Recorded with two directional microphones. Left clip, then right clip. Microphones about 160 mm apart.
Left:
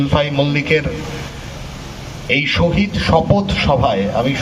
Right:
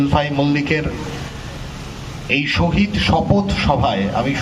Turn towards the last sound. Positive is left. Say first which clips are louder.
# left 2 dB
turn(degrees=40)  # may be behind; listen again after turning